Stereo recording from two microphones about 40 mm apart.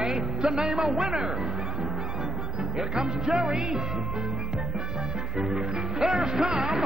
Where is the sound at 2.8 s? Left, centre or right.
Centre.